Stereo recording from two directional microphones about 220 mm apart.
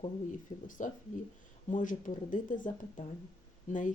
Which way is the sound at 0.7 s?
35° left (ahead or behind).